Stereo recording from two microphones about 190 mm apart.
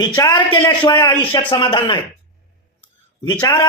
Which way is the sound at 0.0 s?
15° left (ahead or behind).